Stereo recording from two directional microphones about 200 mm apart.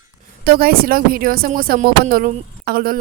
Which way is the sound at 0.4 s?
50° right (ahead or behind).